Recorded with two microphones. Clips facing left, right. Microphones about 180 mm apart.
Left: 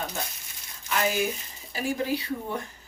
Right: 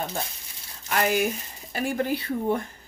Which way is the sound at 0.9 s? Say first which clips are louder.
Right 3 dB; 55° right (ahead or behind).